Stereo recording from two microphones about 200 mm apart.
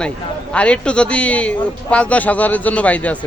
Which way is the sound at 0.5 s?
5° left (ahead or behind).